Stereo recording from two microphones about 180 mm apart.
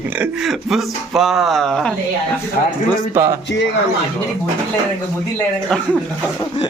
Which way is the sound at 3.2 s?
10° right (ahead or behind).